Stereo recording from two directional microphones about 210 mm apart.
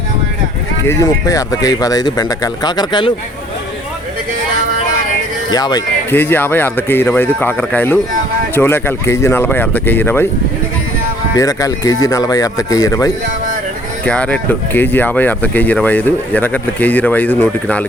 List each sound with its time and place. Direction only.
0.9 s speech: 15° left (ahead or behind)
5.5 s speech: 20° left (ahead or behind)
11.3 s speech: 15° left (ahead or behind)
14.0 s speech: 5° left (ahead or behind)